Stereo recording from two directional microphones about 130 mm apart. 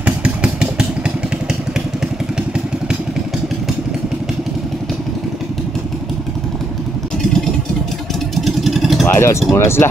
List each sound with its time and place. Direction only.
0.0 s vehicle: 10° right (ahead or behind)
8.4 s vehicle: centre (ahead or behind)
9.0 s a sound: 20° left (ahead or behind)
9.5 s speech: 20° left (ahead or behind)